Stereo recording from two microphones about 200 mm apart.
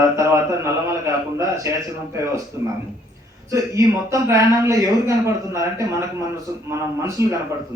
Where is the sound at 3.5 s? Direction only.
15° right (ahead or behind).